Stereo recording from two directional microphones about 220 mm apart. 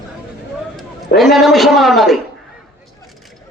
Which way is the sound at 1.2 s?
Centre (ahead or behind).